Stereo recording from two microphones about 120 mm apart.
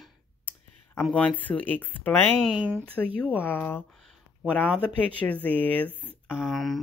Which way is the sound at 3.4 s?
15° left (ahead or behind).